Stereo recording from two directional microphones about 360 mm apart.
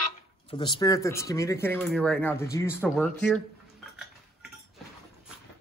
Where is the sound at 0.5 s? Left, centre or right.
Centre.